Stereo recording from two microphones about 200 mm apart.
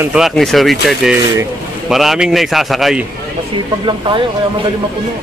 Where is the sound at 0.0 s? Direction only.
5° right (ahead or behind).